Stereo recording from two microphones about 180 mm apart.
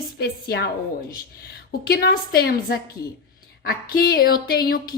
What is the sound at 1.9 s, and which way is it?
A woman's voice, 60° left (ahead or behind).